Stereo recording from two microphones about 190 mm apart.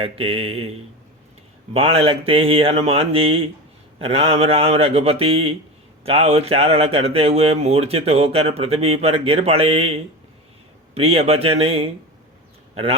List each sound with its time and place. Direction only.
0.0 s a man's voice: 30° right (ahead or behind)